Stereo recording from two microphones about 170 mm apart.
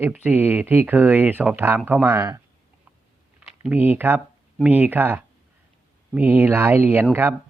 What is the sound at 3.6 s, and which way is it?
A man's voice, 10° right (ahead or behind).